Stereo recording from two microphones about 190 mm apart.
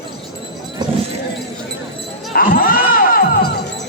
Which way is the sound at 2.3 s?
50° left (ahead or behind).